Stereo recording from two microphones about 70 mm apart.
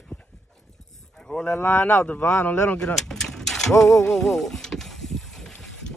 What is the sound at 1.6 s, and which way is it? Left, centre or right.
Speech, left.